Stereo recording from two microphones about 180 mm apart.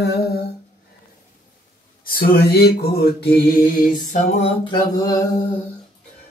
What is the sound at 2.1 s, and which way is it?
Mantra, 55° left (ahead or behind).